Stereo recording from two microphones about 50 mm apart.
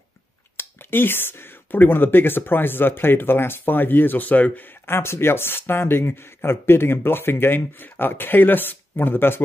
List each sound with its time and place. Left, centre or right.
0.6 s speech: left